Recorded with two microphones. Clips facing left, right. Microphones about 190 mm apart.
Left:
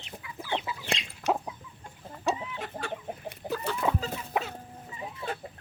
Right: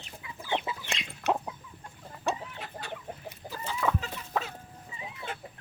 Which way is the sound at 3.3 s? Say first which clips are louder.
Left 7 dB; 65° left (ahead or behind).